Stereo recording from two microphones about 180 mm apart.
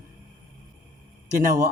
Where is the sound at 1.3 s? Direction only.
45° right (ahead or behind).